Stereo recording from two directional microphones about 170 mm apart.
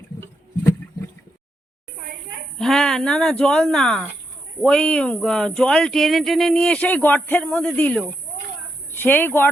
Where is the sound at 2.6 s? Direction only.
Centre (ahead or behind).